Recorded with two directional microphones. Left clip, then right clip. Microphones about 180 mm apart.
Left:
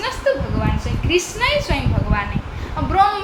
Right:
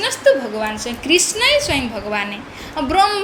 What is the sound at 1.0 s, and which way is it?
A woman's voice, 50° right (ahead or behind).